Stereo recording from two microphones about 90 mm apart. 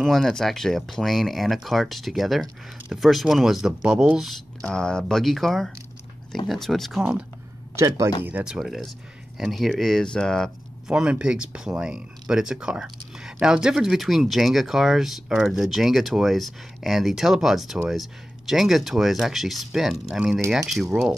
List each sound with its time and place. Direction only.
0.0 s speech: 5° left (ahead or behind)
4.6 s speech: 10° left (ahead or behind); by 7.2 s 10° right (ahead or behind)
7.7 s speech: 30° right (ahead or behind)
8.2 s speech: 20° right (ahead or behind)
8.5 s speech: 5° right (ahead or behind)
10.9 s speech: 10° right (ahead or behind)